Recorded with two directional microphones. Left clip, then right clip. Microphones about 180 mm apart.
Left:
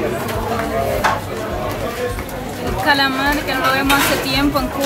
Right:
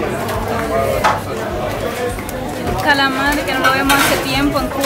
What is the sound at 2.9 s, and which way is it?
A woman's voice, 10° left (ahead or behind).